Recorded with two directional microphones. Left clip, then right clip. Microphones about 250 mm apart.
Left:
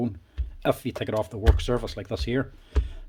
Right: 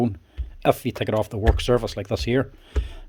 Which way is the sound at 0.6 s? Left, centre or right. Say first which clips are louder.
Right 5 dB; right.